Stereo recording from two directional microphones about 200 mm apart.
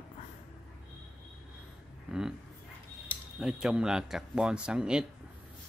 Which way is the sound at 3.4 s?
5° right (ahead or behind).